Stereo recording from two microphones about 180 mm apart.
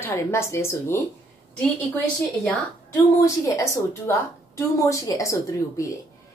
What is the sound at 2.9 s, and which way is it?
A woman's voice, 15° left (ahead or behind).